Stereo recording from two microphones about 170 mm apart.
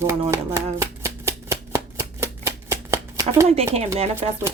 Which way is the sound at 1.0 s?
15° right (ahead or behind).